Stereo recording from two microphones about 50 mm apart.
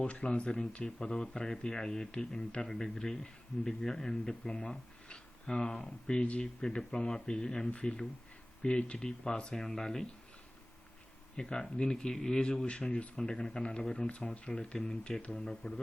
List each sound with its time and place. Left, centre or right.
0.0 s speech: left
11.3 s speech: centre
15.2 s speech: left
15.4 s speech: centre